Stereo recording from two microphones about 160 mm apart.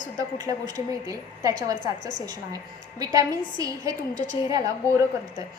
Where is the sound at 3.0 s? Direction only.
20° right (ahead or behind).